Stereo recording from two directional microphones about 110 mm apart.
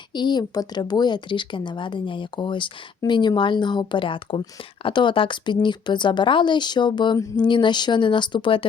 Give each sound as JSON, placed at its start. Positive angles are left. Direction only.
{"t": 0.1, "sound": "speech", "side_deg": 45}